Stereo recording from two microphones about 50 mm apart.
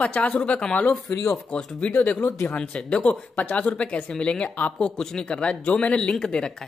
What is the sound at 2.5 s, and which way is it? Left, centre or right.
Speech, left.